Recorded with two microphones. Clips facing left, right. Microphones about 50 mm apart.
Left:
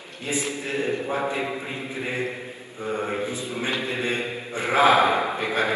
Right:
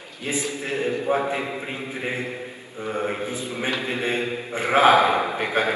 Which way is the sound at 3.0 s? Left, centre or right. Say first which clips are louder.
Right 1 dB; right.